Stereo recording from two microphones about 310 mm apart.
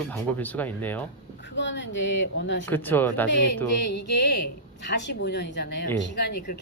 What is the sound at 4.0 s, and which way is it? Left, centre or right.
Speech, left.